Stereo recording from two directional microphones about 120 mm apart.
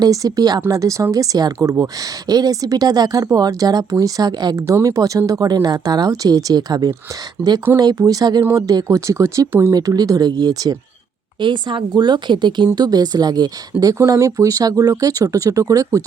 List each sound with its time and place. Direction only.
0.0 s speech: 30° right (ahead or behind)
7.4 s speech: 15° right (ahead or behind)
7.8 s speech: 35° right (ahead or behind)